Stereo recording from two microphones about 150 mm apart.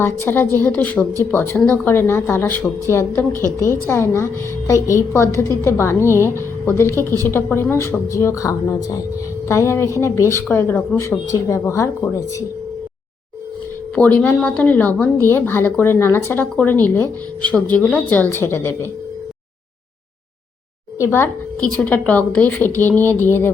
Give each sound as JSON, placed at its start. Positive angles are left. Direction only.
{"t": 0.0, "sound": "a woman's voice", "side_deg": 15}
{"t": 13.9, "sound": "a woman's voice", "side_deg": 10}
{"t": 21.0, "sound": "a woman's voice", "side_deg": 15}